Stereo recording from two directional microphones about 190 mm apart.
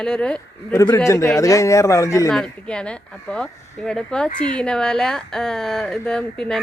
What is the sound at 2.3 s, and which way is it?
A woman's voice, 5° left (ahead or behind).